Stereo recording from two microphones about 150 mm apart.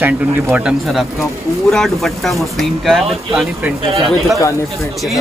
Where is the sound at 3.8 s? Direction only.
40° right (ahead or behind).